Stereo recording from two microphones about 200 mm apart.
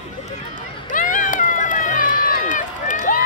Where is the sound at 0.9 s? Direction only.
40° left (ahead or behind).